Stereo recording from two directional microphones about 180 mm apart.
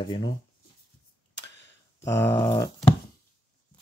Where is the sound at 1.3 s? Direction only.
85° left.